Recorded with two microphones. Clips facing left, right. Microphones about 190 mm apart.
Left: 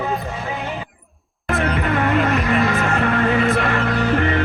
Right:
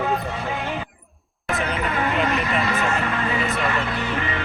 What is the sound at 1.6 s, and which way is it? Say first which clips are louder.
Music: left 5 dB; 55° left (ahead or behind).